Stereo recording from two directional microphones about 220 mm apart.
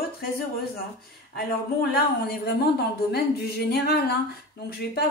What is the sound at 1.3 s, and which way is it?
Speech, 45° left (ahead or behind).